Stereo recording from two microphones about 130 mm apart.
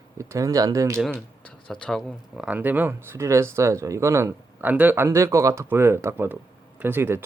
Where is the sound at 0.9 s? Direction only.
5° left (ahead or behind).